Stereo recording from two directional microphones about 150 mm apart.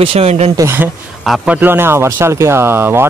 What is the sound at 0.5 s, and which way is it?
Speech, 15° right (ahead or behind).